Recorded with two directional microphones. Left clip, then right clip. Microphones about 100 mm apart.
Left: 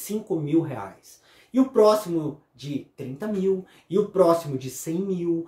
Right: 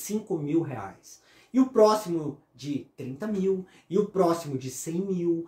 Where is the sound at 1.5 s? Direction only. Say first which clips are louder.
Left 2 dB; 10° left (ahead or behind).